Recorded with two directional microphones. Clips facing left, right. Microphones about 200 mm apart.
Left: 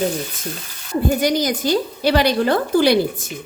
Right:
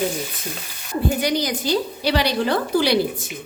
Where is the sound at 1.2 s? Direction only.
45° left (ahead or behind).